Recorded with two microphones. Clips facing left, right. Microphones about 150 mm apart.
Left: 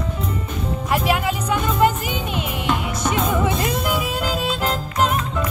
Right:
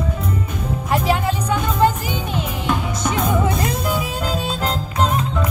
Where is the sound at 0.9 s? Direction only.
30° right (ahead or behind).